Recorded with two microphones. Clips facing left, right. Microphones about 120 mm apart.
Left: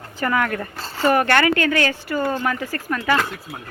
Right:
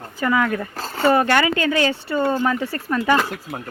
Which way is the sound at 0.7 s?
45° right (ahead or behind).